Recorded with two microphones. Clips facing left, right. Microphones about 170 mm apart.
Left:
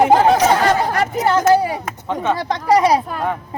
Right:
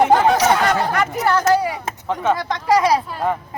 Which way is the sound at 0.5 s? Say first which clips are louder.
Left 2 dB; 30° left (ahead or behind).